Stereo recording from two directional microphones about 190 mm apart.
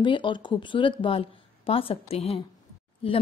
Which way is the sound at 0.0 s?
25° left (ahead or behind).